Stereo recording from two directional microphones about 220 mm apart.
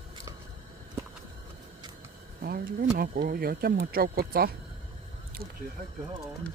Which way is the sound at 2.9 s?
45° right (ahead or behind).